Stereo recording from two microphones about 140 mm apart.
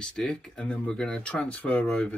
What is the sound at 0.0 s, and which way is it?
Speech, 5° left (ahead or behind).